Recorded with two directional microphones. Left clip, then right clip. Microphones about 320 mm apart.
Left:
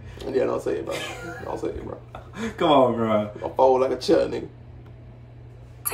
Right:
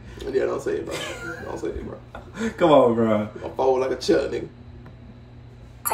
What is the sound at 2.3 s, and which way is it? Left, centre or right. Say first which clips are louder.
Speech: right 3 dB; centre.